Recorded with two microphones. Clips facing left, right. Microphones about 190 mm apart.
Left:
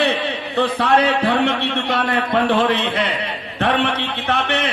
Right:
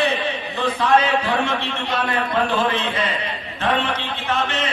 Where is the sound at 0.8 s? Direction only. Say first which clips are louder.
Even; 65° left (ahead or behind).